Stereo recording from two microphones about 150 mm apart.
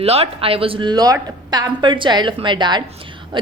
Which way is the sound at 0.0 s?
40° right (ahead or behind).